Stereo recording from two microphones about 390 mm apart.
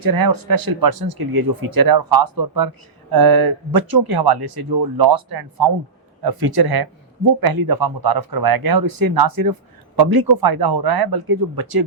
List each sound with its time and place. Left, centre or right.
0.0 s speech: right